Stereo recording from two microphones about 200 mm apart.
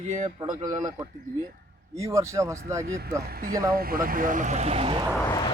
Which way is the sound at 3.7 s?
50° right (ahead or behind).